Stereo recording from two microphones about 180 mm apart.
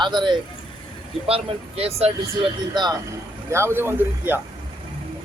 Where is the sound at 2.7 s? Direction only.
25° right (ahead or behind).